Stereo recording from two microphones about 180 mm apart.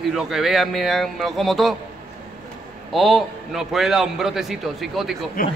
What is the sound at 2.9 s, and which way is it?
A man's voice, centre (ahead or behind).